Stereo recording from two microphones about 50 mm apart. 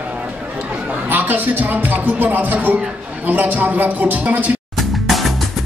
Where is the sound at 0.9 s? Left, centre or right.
Right.